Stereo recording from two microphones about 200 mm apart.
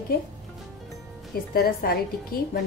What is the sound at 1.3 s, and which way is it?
A woman's voice, 50° left (ahead or behind).